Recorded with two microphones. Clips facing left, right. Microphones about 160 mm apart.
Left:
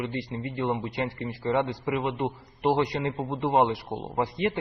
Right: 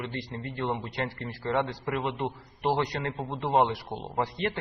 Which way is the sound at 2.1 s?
15° left (ahead or behind).